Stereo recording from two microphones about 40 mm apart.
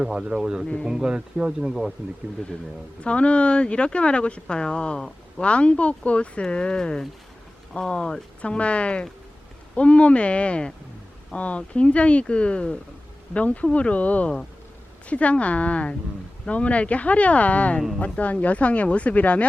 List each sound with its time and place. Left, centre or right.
0.0 s speech: right
3.0 s speech: left